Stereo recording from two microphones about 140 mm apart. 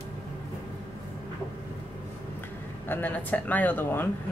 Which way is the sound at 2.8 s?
15° left (ahead or behind).